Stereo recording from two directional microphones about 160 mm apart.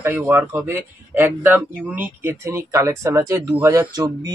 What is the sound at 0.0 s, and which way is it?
Speech, 15° right (ahead or behind).